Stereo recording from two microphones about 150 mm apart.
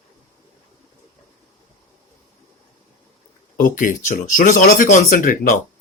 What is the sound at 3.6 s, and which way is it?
Speech, 60° left (ahead or behind).